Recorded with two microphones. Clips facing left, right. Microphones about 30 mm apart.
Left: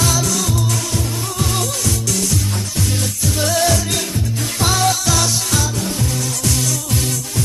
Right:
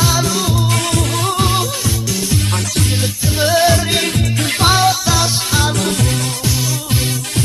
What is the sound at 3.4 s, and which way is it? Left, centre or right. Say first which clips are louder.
Music: right 5 dB; right.